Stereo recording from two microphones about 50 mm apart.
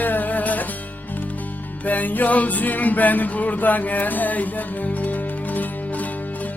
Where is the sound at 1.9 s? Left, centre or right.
Left.